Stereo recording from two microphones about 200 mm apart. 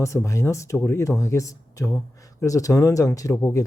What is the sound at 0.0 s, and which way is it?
Speech, 15° left (ahead or behind).